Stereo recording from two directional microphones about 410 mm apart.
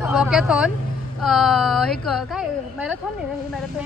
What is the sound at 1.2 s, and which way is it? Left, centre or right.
Speech, centre.